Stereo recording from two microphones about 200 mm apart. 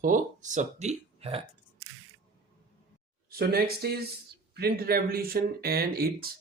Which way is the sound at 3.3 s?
50° right (ahead or behind).